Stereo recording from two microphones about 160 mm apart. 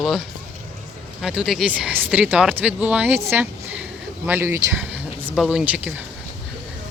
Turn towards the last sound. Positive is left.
turn(degrees=-10)  # may be behind; listen again after turning